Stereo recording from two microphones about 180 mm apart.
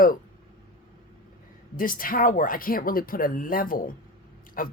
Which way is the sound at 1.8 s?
50° left (ahead or behind).